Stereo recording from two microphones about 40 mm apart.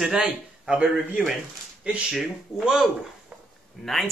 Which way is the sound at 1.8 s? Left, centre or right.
Right.